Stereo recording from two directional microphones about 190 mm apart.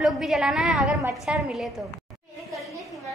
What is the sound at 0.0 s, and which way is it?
Speech, 5° right (ahead or behind).